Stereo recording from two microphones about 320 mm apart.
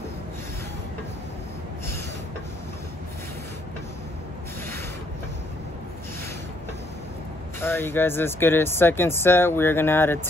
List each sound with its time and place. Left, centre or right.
7.6 s speech: centre